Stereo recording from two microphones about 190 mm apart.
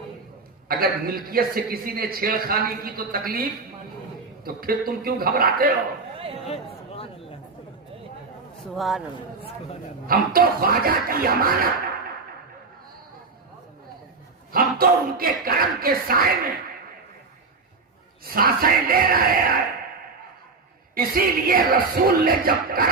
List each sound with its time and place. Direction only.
0.7 s a man's voice: 50° right (ahead or behind)
4.4 s a man's voice: 50° right (ahead or behind)
6.1 s a sound: 30° right (ahead or behind)
6.4 s a sound: 30° left (ahead or behind)
8.6 s a man's voice: centre (ahead or behind)
10.1 s a man's voice: 50° right (ahead or behind)
14.5 s a man's voice: 50° right (ahead or behind)
18.3 s a man's voice: 50° right (ahead or behind)
20.9 s a man's voice: 50° right (ahead or behind)